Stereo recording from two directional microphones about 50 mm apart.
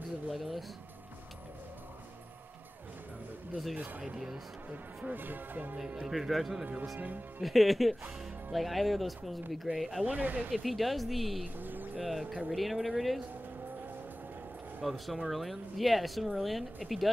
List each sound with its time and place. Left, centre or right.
0.3 s a sound: centre
3.7 s speech: right
6.0 s speech: centre
7.0 s speech: right
7.4 s speech: centre
10.0 s speech: right
10.5 s speech: centre
11.6 s music: right
12.0 s speech: centre
14.8 s speech: centre